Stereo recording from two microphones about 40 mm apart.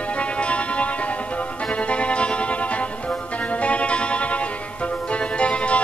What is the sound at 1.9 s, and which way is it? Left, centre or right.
Music, left.